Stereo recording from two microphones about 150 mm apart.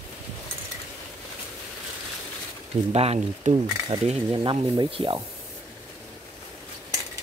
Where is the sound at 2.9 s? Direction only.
45° right (ahead or behind).